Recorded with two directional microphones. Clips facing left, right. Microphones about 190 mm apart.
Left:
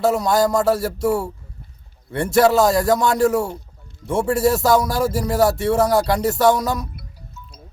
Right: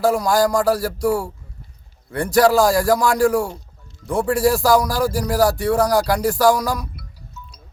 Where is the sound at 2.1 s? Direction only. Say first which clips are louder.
Even; 25° left (ahead or behind).